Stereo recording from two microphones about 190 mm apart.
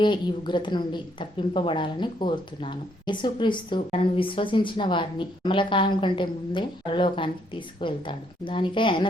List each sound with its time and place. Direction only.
0.0 s a woman's voice: 25° left (ahead or behind)